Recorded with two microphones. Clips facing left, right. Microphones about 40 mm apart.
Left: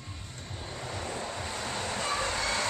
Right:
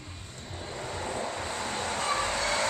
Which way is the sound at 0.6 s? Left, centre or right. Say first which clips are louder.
Right 3 dB; centre.